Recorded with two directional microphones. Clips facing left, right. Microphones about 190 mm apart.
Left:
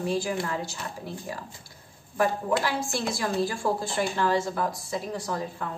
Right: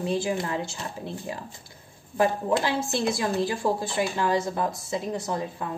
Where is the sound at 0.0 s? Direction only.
20° right (ahead or behind).